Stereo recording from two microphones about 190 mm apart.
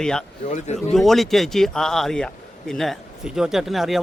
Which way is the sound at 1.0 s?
Centre (ahead or behind).